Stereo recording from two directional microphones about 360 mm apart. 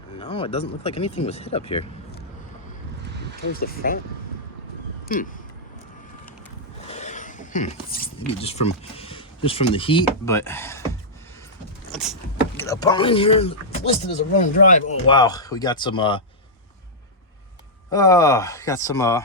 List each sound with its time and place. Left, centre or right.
0.2 s speech: centre
3.6 s speech: left
5.0 s speech: left
6.9 s speech: centre
11.9 s vehicle: centre
12.5 s speech: centre
17.9 s speech: centre